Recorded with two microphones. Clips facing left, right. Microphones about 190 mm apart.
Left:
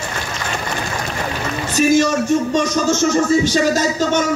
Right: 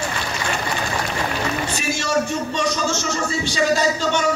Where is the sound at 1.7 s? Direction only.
40° left (ahead or behind).